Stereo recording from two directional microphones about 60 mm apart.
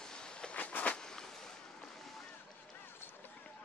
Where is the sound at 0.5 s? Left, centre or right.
Left.